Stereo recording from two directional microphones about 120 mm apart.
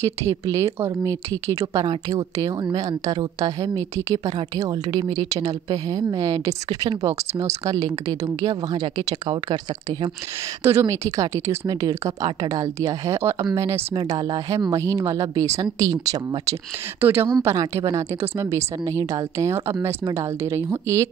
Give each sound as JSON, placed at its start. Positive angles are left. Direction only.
{"t": 0.0, "sound": "a woman's voice", "side_deg": -25}
{"t": 4.9, "sound": "a woman's voice", "side_deg": -40}
{"t": 10.6, "sound": "a woman's voice", "side_deg": -25}
{"t": 13.9, "sound": "a woman's voice", "side_deg": -35}